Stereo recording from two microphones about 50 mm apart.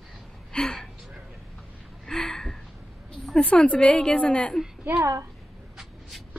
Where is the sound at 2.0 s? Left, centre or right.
Centre.